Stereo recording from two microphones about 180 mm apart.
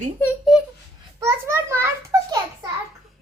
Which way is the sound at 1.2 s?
15° right (ahead or behind).